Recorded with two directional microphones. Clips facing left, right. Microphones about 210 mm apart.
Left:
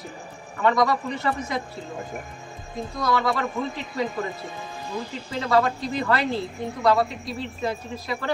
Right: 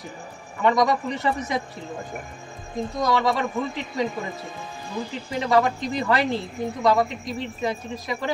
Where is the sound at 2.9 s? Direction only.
20° right (ahead or behind).